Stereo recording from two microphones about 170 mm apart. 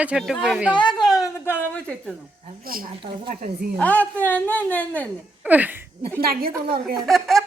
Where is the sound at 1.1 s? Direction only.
15° left (ahead or behind).